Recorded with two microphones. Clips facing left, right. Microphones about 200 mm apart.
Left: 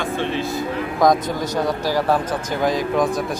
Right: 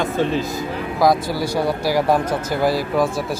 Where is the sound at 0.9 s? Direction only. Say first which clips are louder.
Even; 5° right (ahead or behind).